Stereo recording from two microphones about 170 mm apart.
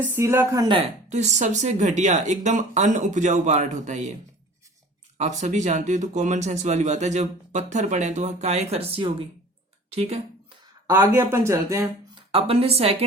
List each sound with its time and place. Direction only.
0.0 s speech: 15° right (ahead or behind)
0.8 s speech: 40° right (ahead or behind)
5.1 s speech: 45° right (ahead or behind)
10.8 s speech: 15° right (ahead or behind)
12.1 s a woman's voice: 35° right (ahead or behind)